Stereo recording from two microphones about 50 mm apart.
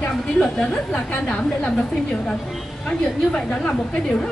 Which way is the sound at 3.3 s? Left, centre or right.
Centre.